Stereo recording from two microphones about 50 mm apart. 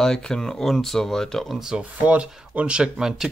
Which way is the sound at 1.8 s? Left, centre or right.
Right.